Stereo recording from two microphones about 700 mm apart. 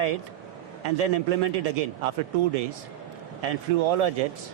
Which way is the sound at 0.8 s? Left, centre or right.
Right.